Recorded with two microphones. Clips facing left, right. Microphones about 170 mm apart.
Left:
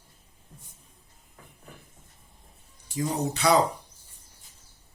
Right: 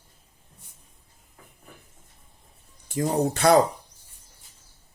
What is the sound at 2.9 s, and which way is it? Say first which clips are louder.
Speech: right 5 dB; 55° right (ahead or behind).